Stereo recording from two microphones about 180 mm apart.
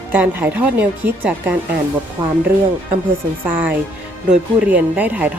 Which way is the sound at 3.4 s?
10° right (ahead or behind).